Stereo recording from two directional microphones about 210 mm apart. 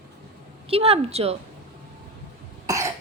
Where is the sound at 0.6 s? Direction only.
30° right (ahead or behind).